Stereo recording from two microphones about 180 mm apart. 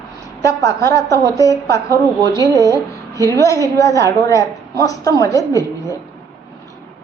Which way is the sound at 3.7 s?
20° left (ahead or behind).